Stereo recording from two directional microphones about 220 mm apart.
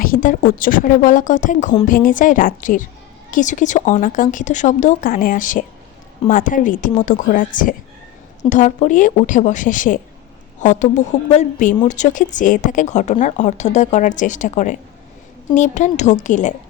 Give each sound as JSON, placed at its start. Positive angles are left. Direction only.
{"t": 0.0, "sound": "a woman's voice", "side_deg": 40}